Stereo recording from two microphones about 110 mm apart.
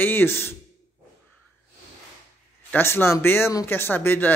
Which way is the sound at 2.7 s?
20° left (ahead or behind).